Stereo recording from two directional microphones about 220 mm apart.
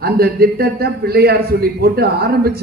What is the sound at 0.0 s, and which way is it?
A man's voice, 45° right (ahead or behind).